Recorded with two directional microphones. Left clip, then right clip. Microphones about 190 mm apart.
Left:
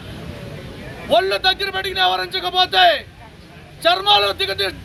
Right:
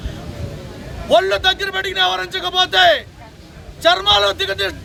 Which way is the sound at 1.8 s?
30° right (ahead or behind).